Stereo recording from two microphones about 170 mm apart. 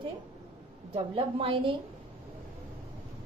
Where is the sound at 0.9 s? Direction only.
35° right (ahead or behind).